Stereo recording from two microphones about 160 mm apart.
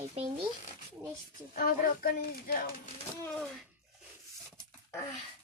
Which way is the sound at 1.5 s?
65° left (ahead or behind).